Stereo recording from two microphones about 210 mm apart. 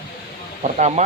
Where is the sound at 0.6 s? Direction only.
35° right (ahead or behind).